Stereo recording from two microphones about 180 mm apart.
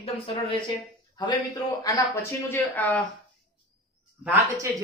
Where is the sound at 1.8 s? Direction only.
15° left (ahead or behind).